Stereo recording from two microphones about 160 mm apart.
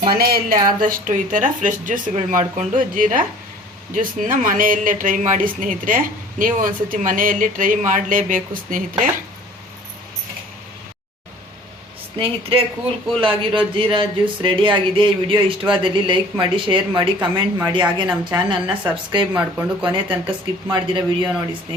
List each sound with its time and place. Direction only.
0.1 s a woman's voice: 70° right (ahead or behind)
12.2 s speech: 35° right (ahead or behind)
19.3 s speech: 10° right (ahead or behind)
19.8 s speech: 30° right (ahead or behind)